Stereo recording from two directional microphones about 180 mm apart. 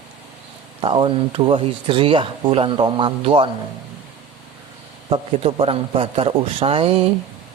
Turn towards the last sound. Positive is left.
turn(degrees=-35)  # may be behind; listen again after turning